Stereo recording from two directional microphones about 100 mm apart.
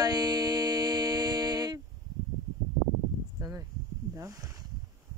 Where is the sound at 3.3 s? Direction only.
35° right (ahead or behind).